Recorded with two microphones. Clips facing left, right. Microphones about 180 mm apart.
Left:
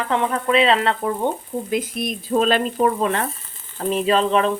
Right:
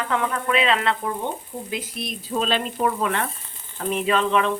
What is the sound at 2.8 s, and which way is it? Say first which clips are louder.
Speech: left 2 dB; 35° left (ahead or behind).